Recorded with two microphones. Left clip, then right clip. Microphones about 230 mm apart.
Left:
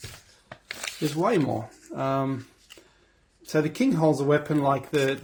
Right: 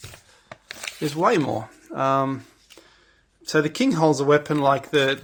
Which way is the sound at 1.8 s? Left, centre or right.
Right.